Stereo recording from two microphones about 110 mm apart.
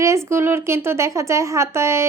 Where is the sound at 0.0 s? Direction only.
25° right (ahead or behind).